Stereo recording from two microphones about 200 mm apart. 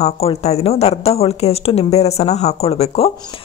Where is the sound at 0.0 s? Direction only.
30° left (ahead or behind).